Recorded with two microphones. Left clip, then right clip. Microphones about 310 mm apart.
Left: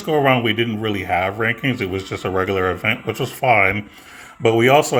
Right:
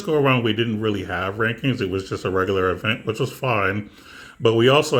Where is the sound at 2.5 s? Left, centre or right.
Left.